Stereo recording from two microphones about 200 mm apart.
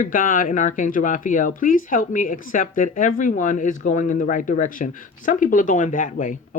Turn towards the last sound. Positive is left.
turn(degrees=40)  # may be behind; listen again after turning